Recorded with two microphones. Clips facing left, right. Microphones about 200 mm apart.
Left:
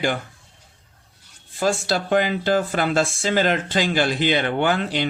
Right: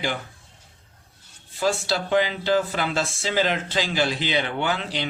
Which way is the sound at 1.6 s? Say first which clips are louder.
Left 2 dB; 50° left (ahead or behind).